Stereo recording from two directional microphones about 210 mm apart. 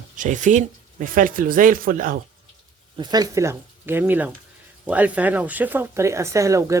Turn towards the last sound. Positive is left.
turn(degrees=-15)  # may be behind; listen again after turning